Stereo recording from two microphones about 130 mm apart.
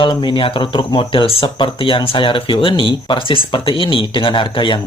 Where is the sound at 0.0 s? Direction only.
35° left (ahead or behind).